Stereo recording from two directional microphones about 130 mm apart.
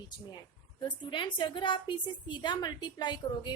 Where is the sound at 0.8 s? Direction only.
40° left (ahead or behind).